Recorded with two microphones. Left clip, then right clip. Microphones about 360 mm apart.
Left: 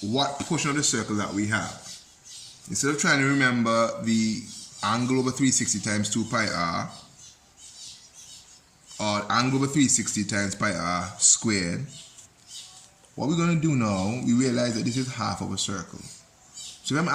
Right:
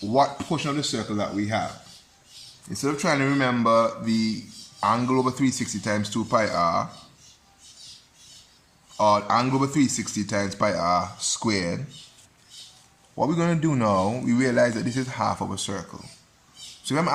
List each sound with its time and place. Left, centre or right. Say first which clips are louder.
0.2 s speech: right 5 dB; centre
2.8 s speech: left 1 dB; centre
9.0 s speech: right 5 dB; centre
13.1 s speech: right 3 dB; centre
16.8 s speech: right 2 dB; centre